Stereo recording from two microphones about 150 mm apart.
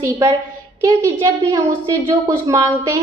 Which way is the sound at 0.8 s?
25° right (ahead or behind).